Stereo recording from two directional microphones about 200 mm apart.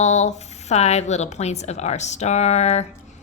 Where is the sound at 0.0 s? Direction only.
35° left (ahead or behind).